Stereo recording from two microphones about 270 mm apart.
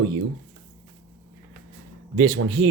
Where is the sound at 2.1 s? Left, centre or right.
Right.